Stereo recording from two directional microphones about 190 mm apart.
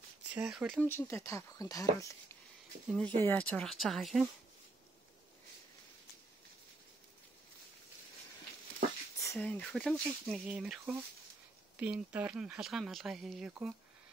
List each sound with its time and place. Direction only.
0.3 s speech: 5° right (ahead or behind)
0.8 s speech: 10° left (ahead or behind)
9.2 s speech: 10° left (ahead or behind); by 13.7 s 5° right (ahead or behind)